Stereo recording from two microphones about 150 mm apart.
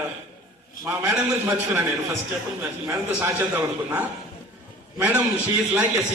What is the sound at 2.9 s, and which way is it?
A man's voice, 20° right (ahead or behind).